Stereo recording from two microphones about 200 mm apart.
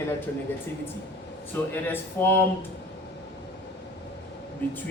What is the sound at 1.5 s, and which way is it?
Speech, 10° left (ahead or behind).